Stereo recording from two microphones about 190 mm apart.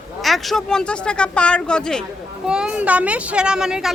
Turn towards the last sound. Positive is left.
turn(degrees=-5)  # may be behind; listen again after turning